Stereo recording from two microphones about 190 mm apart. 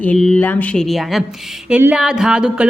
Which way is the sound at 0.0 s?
5° left (ahead or behind).